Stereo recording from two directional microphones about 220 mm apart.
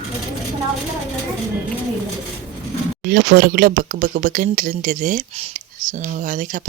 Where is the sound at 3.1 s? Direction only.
40° right (ahead or behind).